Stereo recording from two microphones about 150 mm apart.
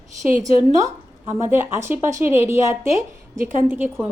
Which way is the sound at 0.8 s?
15° right (ahead or behind).